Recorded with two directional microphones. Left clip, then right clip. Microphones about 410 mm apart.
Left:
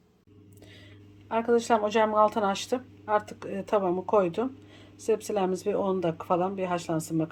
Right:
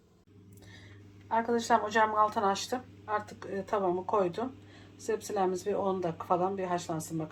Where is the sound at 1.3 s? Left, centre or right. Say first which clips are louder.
Left 3 dB; left.